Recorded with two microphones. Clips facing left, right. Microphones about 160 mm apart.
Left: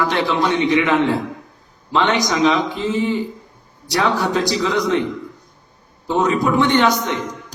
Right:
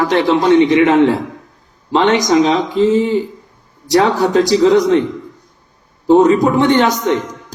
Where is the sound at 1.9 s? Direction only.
40° right (ahead or behind).